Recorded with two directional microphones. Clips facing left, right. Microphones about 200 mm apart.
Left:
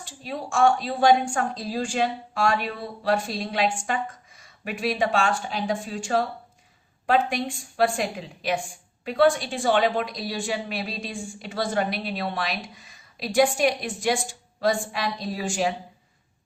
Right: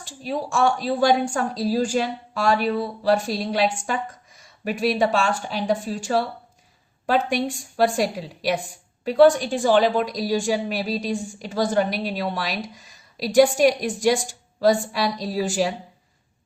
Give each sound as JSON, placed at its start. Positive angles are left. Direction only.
{"t": 0.2, "sound": "a woman's voice", "side_deg": -40}
{"t": 4.6, "sound": "a woman's voice", "side_deg": -40}
{"t": 7.3, "sound": "a woman's voice", "side_deg": -40}